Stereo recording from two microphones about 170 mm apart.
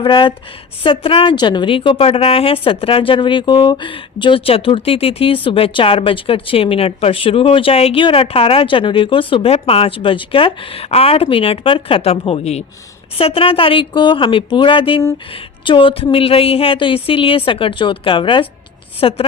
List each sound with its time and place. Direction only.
0.0 s a woman's voice: 30° left (ahead or behind)